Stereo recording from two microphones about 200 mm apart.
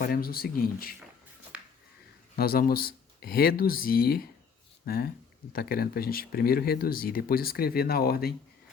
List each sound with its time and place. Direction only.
0.0 s speech: 50° left (ahead or behind)
2.3 s speech: 50° left (ahead or behind)